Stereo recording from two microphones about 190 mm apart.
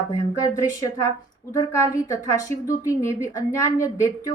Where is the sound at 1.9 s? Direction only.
15° left (ahead or behind).